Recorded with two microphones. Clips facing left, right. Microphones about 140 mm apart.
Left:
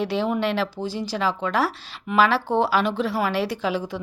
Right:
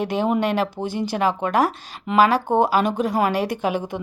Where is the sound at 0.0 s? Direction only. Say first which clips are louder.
Right 2 dB; 50° right (ahead or behind).